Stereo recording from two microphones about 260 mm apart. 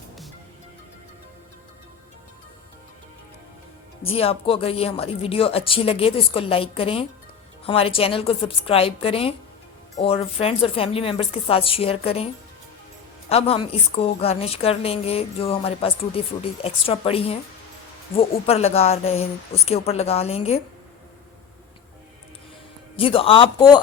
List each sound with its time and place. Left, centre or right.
4.0 s a woman's voice: left
23.0 s a woman's voice: left